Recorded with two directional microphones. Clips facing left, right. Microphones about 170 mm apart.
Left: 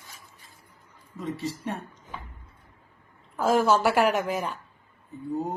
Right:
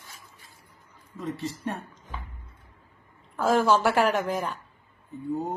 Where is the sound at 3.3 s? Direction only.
10° left (ahead or behind).